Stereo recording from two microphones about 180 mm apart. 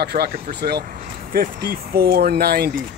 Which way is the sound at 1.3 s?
55° right (ahead or behind).